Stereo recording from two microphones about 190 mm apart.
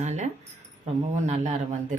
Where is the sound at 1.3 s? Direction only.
40° right (ahead or behind).